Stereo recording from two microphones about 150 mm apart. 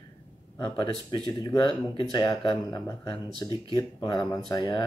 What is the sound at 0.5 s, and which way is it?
Speech, 35° left (ahead or behind).